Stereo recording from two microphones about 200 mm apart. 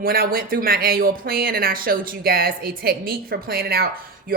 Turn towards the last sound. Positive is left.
turn(degrees=-45)  # may be behind; listen again after turning